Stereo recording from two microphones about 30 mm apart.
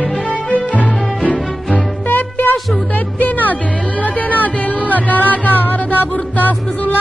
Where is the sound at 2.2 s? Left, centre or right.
Left.